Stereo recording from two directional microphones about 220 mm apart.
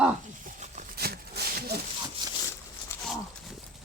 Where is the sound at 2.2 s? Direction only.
20° right (ahead or behind).